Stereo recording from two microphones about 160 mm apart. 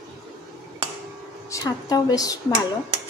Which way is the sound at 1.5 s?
20° left (ahead or behind).